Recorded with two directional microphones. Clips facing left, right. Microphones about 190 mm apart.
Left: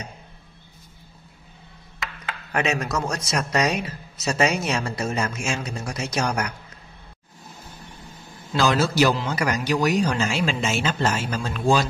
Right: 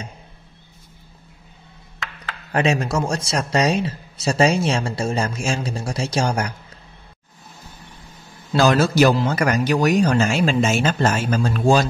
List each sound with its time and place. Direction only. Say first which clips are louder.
2.5 s speech: right 4 dB; 30° right (ahead or behind)
8.5 s speech: right 4 dB; 45° right (ahead or behind)